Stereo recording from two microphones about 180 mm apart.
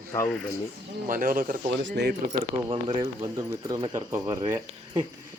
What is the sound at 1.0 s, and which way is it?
Speech, 50° right (ahead or behind).